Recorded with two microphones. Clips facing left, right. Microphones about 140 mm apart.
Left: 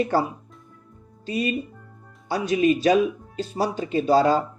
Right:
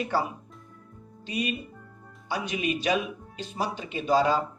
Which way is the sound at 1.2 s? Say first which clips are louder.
Left 5 dB; 40° left (ahead or behind).